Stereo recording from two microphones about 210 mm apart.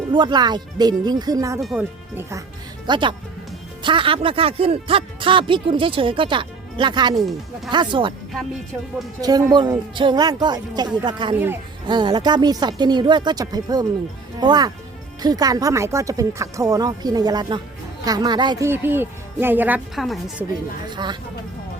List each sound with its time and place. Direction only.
0.1 s speech: 20° right (ahead or behind)
2.8 s speech: 20° right (ahead or behind)
9.2 s speech: 20° right (ahead or behind); by 20.3 s centre (ahead or behind)
20.8 s speech: 20° right (ahead or behind)